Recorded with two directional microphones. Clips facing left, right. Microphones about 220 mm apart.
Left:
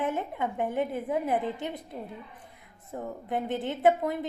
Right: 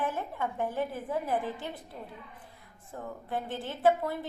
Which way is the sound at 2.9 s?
20° left (ahead or behind).